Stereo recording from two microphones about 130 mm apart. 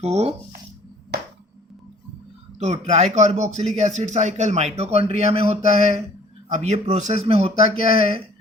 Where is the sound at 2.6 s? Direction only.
60° right (ahead or behind).